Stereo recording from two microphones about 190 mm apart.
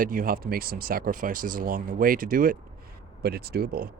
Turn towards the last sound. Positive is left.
turn(degrees=-55)  # may be behind; listen again after turning